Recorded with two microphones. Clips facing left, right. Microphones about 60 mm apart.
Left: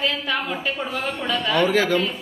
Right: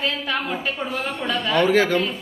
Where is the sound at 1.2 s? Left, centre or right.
Right.